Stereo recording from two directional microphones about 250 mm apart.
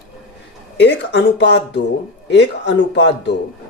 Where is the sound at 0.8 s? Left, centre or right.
Left.